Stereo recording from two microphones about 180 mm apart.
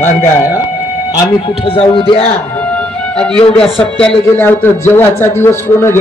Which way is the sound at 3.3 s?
30° left (ahead or behind).